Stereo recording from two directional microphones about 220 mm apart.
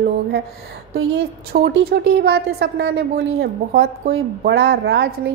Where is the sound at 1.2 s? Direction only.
50° right (ahead or behind).